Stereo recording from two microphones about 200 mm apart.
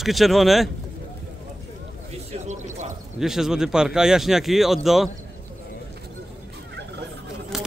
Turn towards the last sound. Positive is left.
turn(degrees=0)  # may be behind; listen again after turning